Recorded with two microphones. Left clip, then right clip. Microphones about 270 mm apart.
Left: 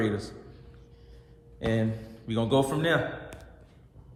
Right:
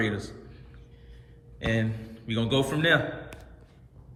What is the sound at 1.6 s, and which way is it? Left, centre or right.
A man's voice, centre.